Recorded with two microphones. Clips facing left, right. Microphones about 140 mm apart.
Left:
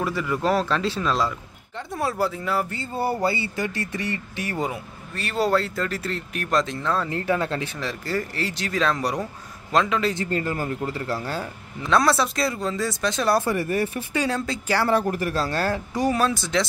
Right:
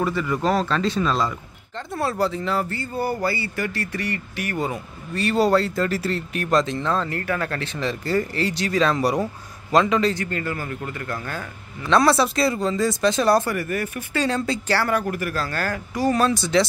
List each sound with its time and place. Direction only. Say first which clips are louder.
0.0 s speech: right 2 dB; 5° left (ahead or behind)
2.8 s speech: even; 30° left (ahead or behind)
4.6 s speech: right 2 dB; 5° left (ahead or behind)
7.1 s a man's voice: left 2 dB; 20° left (ahead or behind); by 10.1 s centre (ahead or behind)
10.1 s speech: left 2 dB; 30° left (ahead or behind)
11.9 s speech: right 3 dB; centre (ahead or behind)
13.5 s speech: left 2 dB; 30° left (ahead or behind)
14.1 s speech: right 4 dB; 5° left (ahead or behind)
14.9 s speech: left 2 dB; 30° left (ahead or behind)
16.1 s speech: right 4 dB; centre (ahead or behind)